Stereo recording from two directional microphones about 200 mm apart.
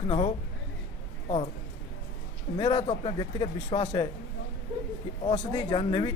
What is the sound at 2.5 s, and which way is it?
A man's voice, 25° left (ahead or behind).